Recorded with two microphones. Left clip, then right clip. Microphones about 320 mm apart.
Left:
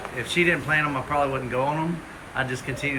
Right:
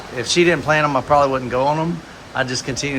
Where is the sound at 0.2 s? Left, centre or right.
Centre.